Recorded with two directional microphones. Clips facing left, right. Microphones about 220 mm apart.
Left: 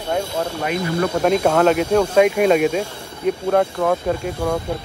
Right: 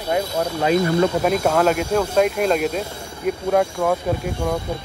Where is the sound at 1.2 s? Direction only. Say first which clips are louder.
Left 2 dB; centre (ahead or behind).